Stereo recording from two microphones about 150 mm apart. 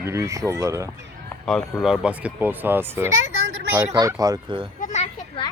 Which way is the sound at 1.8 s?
5° right (ahead or behind).